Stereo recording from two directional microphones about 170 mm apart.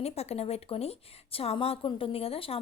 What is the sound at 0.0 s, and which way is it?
A woman's voice, 40° left (ahead or behind).